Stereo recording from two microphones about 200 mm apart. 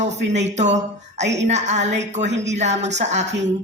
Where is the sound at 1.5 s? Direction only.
35° right (ahead or behind).